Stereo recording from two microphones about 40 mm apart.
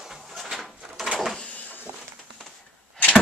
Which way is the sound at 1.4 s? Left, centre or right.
Left.